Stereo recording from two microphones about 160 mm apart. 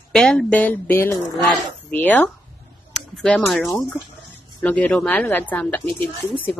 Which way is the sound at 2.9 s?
5° left (ahead or behind).